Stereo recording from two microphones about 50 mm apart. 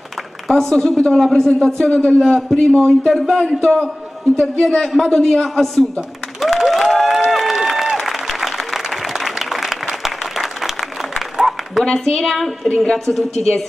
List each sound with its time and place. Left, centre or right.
0.5 s a woman's voice: centre
1.8 s a man's voice: centre
2.1 s a woman's voice: centre
4.8 s a woman's voice: centre
6.6 s applause: centre
11.8 s speech: centre